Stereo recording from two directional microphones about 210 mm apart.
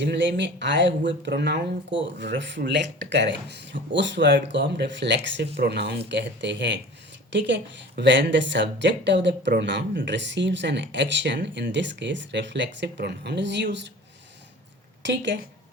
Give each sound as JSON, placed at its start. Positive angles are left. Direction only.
{"t": 0.0, "sound": "speech", "side_deg": -55}
{"t": 15.0, "sound": "speech", "side_deg": -60}